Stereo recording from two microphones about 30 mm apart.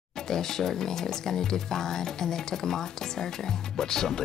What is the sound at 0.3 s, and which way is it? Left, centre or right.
Speech, centre.